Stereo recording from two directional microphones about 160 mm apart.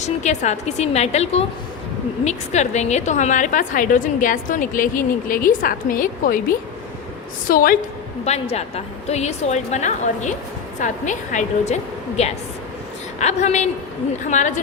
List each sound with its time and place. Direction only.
0.0 s a woman's voice: 45° left (ahead or behind)
7.4 s a woman's voice: 60° left (ahead or behind)
8.2 s a woman's voice: 40° left (ahead or behind)